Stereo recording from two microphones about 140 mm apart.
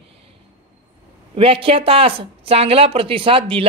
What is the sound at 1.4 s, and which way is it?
Speech, 40° right (ahead or behind).